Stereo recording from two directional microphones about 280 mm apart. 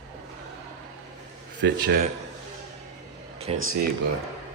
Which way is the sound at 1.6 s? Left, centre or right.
Right.